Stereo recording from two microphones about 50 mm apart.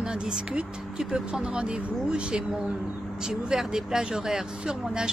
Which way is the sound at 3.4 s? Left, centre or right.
Centre.